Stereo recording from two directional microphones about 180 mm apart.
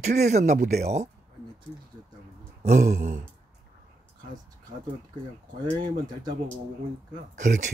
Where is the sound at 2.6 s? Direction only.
45° right (ahead or behind).